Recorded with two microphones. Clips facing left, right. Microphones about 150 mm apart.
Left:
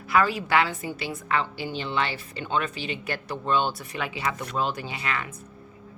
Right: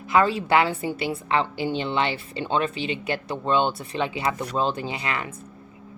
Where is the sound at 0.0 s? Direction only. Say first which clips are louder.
Right 3 dB; 25° right (ahead or behind).